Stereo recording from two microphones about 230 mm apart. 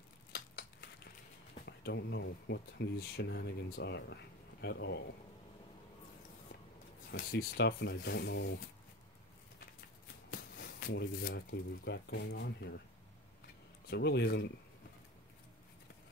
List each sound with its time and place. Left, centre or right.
0.3 s a sound: left
1.7 s speech: left
7.1 s speech: left
10.5 s speech: left
13.8 s speech: left